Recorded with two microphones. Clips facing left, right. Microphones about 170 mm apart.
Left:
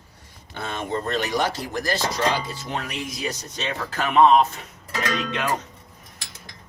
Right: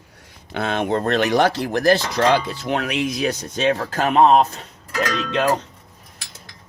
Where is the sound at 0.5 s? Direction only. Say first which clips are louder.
Right 7 dB; 75° right (ahead or behind); by 3.7 s 55° right (ahead or behind).